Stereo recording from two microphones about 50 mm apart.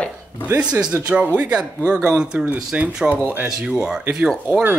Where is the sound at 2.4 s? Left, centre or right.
Right.